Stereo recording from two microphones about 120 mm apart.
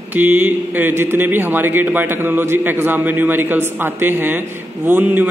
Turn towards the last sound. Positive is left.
turn(degrees=-15)  # may be behind; listen again after turning